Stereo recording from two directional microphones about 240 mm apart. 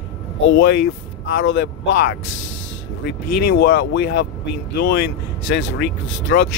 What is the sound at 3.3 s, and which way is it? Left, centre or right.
Speech, left.